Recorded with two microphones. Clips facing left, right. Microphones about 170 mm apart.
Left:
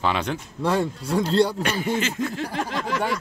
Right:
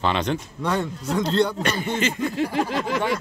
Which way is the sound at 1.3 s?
35° left (ahead or behind).